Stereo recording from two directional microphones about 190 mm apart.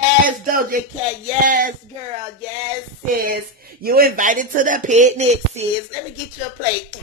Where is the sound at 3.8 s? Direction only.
50° right (ahead or behind); by 5.7 s 35° right (ahead or behind).